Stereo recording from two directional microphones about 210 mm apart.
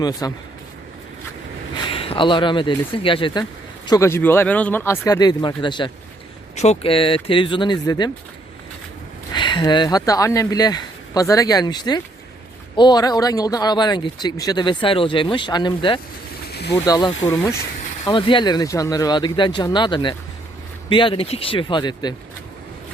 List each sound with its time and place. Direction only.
0.0 s speech: 15° left (ahead or behind)
1.7 s speech: 25° left (ahead or behind)
9.3 s speech: 20° left (ahead or behind)
16.5 s a sound: 50° left (ahead or behind)
16.8 s speech: 20° left (ahead or behind)
18.0 s speech: 25° left (ahead or behind)